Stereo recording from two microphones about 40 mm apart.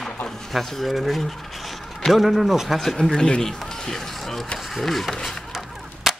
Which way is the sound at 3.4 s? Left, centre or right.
Centre.